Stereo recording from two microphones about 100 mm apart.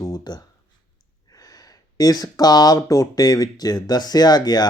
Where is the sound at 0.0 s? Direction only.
45° left (ahead or behind).